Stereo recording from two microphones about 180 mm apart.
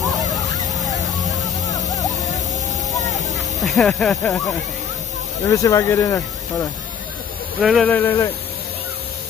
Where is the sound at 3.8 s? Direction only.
Centre (ahead or behind).